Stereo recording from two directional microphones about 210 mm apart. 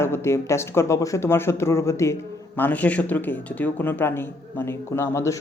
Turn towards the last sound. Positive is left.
turn(degrees=15)  # may be behind; listen again after turning